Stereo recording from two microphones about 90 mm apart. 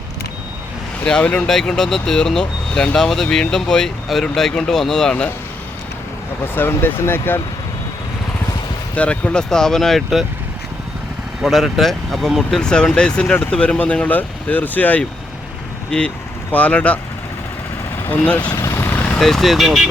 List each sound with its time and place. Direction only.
1.0 s speech: 10° left (ahead or behind)
6.4 s speech: 25° left (ahead or behind)
9.0 s speech: 15° left (ahead or behind)
11.4 s speech: centre (ahead or behind)
18.0 s speech: 20° left (ahead or behind)
18.5 s vehicle: 30° left (ahead or behind)
19.2 s speech: 5° left (ahead or behind)